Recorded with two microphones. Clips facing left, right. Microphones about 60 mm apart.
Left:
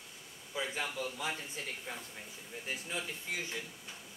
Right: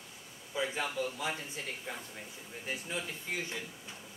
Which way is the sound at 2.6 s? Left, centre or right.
Centre.